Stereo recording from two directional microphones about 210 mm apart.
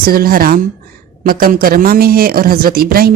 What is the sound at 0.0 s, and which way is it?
Speech, 45° right (ahead or behind).